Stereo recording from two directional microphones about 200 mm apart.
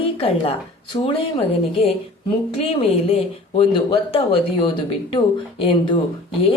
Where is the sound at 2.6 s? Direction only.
30° left (ahead or behind).